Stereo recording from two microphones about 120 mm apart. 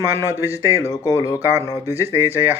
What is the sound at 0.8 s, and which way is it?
Speech, 25° left (ahead or behind).